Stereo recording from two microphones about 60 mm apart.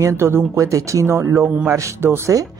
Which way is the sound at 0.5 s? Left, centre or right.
Right.